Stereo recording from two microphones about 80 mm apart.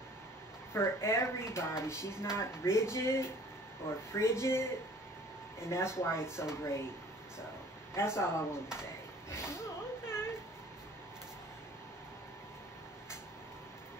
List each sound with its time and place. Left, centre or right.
0.7 s speech: left
7.9 s speech: left
8.7 s a sound: left